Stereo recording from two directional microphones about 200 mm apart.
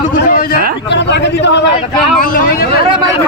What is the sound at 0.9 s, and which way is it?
Speech, 60° left (ahead or behind).